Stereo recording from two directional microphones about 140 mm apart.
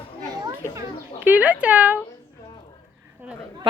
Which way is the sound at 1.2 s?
10° right (ahead or behind).